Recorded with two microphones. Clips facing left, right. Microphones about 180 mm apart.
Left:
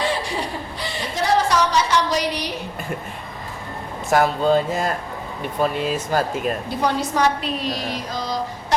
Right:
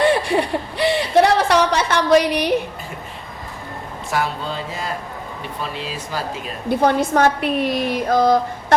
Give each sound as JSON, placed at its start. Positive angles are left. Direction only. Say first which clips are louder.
{"t": 0.0, "sound": "chuckle", "louder": "right 7 dB", "side_deg": -60}
{"t": 4.1, "sound": "speech", "louder": "left 7 dB", "side_deg": 45}
{"t": 6.7, "sound": "a woman's voice", "louder": "right 5 dB", "side_deg": -55}